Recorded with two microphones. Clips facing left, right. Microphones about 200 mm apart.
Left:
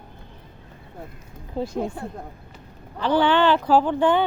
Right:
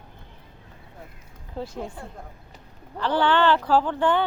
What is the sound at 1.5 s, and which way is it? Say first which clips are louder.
Speech: left 6 dB; 15° left (ahead or behind).